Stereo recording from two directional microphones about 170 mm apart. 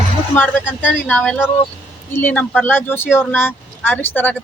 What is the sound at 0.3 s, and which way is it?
Speech, 10° left (ahead or behind).